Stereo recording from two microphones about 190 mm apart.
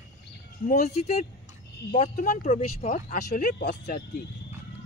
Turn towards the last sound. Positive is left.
turn(degrees=45)  # may be behind; listen again after turning